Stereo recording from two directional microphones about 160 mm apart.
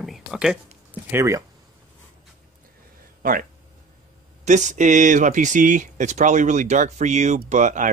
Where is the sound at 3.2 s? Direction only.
60° right (ahead or behind).